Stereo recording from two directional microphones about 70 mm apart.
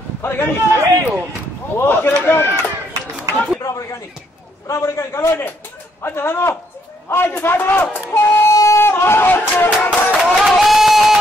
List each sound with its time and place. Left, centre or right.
0.2 s a man's voice: left
0.7 s speech: right
1.8 s a man's voice: left
2.5 s run: right
3.6 s a sound: left
4.6 s a man's voice: left
8.1 s a sound: left
9.5 s music: left
10.4 s a sound: centre